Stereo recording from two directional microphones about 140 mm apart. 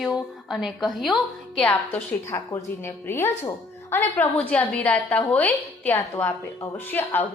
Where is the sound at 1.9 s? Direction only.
20° left (ahead or behind).